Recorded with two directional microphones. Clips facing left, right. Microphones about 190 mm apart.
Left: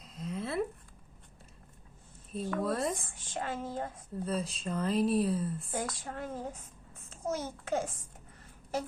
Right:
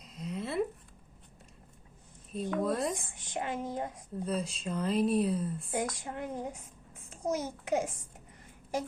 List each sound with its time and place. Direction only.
0.0 s a sound: centre (ahead or behind)
2.3 s speech: centre (ahead or behind)
3.2 s speech: 15° right (ahead or behind)
4.3 s speech: centre (ahead or behind)
5.7 s a child's voice: 15° right (ahead or behind)